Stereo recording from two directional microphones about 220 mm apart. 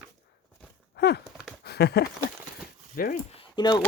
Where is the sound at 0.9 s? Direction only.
50° left (ahead or behind).